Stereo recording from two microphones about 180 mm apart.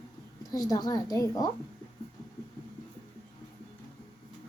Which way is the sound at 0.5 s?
20° left (ahead or behind).